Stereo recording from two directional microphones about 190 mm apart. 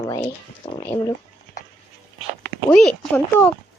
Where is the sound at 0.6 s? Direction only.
30° left (ahead or behind).